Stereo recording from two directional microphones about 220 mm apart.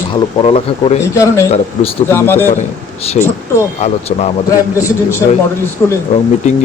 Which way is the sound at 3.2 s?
30° left (ahead or behind).